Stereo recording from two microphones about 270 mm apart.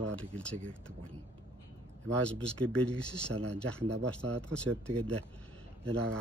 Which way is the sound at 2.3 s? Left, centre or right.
Centre.